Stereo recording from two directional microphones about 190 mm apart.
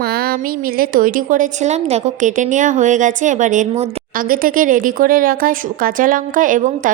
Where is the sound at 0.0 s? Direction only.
55° right (ahead or behind).